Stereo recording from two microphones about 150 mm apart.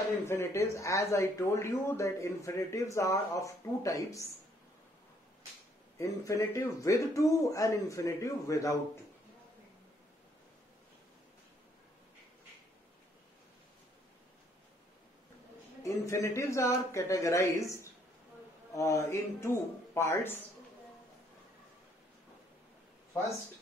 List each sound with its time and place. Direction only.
0.3 s speech: 15° left (ahead or behind)
5.9 s speech: 20° left (ahead or behind)
15.8 s speech: 20° left (ahead or behind)